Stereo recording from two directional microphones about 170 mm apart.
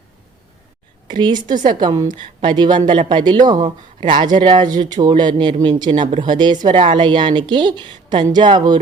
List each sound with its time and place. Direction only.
1.0 s speech: 25° right (ahead or behind)